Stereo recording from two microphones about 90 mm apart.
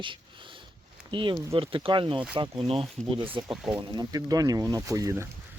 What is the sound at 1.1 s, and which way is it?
Speech, 65° right (ahead or behind).